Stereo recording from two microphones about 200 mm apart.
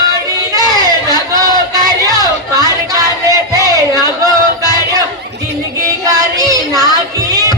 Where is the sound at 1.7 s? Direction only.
20° right (ahead or behind).